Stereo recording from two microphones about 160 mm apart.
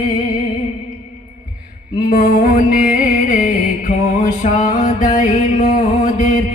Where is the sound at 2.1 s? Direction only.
55° left (ahead or behind).